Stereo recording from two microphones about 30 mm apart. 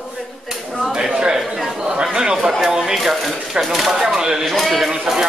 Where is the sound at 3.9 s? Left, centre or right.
Centre.